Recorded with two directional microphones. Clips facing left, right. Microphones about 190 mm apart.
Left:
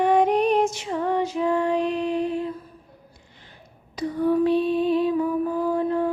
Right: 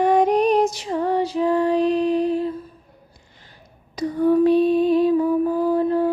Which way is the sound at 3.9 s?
40° right (ahead or behind).